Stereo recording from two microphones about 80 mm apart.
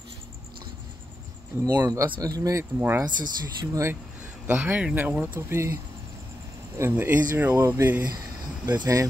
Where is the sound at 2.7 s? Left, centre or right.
Right.